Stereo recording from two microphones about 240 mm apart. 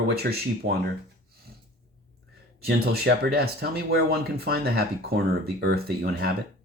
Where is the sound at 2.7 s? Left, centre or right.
Right.